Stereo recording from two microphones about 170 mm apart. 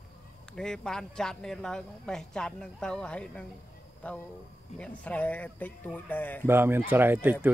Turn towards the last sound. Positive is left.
turn(degrees=-10)  # may be behind; listen again after turning